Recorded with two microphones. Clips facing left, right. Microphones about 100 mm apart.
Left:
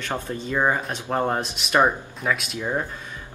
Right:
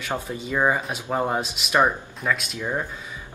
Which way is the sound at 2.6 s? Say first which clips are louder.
Left 1 dB; 15° left (ahead or behind).